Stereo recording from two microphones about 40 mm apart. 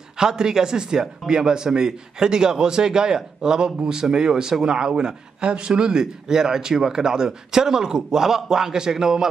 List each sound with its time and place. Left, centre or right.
0.2 s speech: centre